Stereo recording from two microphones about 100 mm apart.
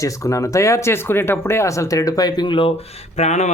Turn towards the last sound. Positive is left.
turn(degrees=90)